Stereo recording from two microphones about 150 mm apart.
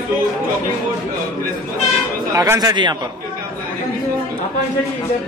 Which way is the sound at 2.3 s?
25° right (ahead or behind).